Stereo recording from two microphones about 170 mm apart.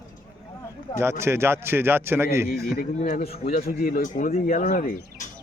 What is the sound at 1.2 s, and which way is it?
Speech, 15° right (ahead or behind).